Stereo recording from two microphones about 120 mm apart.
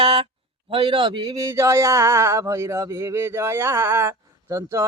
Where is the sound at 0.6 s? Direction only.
45° right (ahead or behind).